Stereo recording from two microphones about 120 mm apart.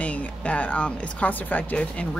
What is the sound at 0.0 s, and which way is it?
A woman's voice, 10° left (ahead or behind).